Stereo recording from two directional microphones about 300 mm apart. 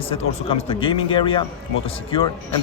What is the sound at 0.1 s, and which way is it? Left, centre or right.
A man's voice, centre.